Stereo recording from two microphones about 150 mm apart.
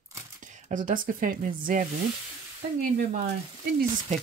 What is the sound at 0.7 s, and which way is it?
Speech, 60° right (ahead or behind).